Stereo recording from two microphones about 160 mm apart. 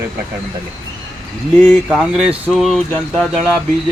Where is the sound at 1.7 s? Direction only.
Centre (ahead or behind).